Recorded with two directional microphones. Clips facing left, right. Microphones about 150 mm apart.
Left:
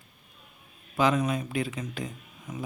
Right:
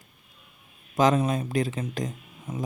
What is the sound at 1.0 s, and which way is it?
Speech, 35° right (ahead or behind).